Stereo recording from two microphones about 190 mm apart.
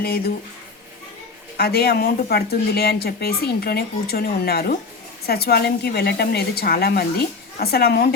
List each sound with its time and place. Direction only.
0.0 s speech: 55° left (ahead or behind)
1.5 s speech: 55° left (ahead or behind)